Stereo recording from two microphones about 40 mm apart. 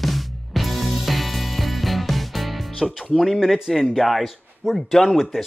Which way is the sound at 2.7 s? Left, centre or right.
Centre.